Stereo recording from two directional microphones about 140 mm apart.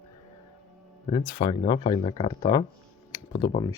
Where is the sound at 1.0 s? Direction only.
30° left (ahead or behind).